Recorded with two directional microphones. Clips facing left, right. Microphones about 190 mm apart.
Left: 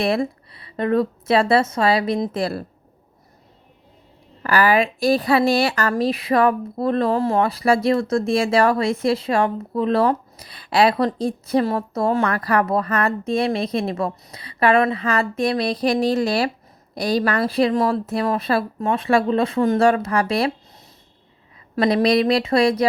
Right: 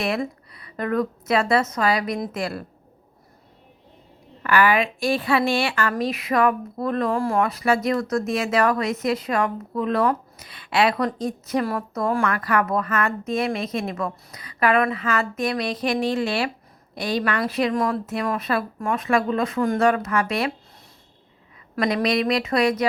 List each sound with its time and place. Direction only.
0.0 s speech: 35° left (ahead or behind)
4.4 s speech: 35° left (ahead or behind)
21.8 s speech: 35° left (ahead or behind)